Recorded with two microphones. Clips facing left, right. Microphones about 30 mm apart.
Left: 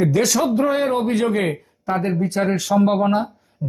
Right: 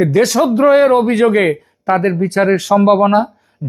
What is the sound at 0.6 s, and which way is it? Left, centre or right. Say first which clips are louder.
Speech: right 9 dB; right.